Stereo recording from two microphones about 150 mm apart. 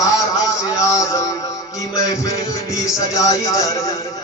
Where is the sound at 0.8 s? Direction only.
20° left (ahead or behind).